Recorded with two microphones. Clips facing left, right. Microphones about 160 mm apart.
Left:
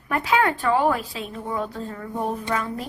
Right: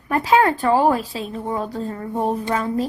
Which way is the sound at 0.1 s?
35° right (ahead or behind).